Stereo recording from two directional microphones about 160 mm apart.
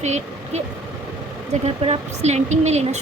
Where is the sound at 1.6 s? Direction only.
40° right (ahead or behind).